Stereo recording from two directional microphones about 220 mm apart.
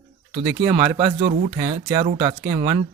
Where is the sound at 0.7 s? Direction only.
20° right (ahead or behind).